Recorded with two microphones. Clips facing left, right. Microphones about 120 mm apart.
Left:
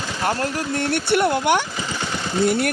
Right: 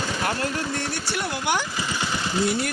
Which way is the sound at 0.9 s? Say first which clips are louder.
Left 10 dB; 60° left (ahead or behind).